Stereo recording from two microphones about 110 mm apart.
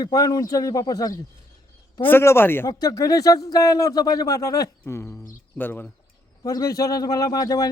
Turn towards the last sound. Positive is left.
turn(degrees=30)  # may be behind; listen again after turning